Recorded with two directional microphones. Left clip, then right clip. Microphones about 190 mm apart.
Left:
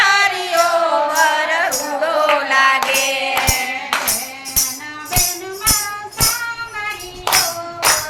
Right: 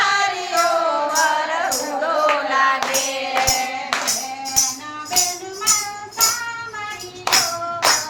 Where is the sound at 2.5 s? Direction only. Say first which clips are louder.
Left 6 dB; 15° left (ahead or behind).